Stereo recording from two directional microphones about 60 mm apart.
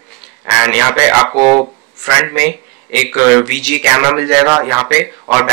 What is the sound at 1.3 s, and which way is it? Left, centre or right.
Speech, centre.